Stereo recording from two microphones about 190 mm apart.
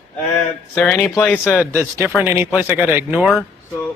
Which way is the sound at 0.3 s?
5° left (ahead or behind).